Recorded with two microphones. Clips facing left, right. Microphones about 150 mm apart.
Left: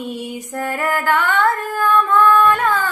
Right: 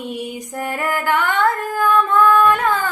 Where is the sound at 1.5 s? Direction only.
45° right (ahead or behind).